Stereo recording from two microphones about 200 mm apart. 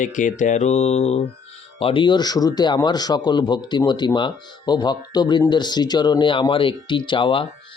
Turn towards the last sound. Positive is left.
turn(degrees=25)  # may be behind; listen again after turning